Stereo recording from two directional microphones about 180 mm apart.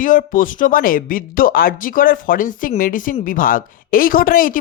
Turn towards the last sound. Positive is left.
turn(degrees=50)  # may be behind; listen again after turning